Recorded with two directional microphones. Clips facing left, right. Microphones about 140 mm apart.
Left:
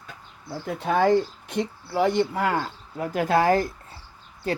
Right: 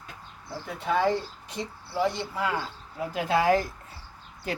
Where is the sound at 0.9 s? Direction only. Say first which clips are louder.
Left 5 dB; 55° left (ahead or behind).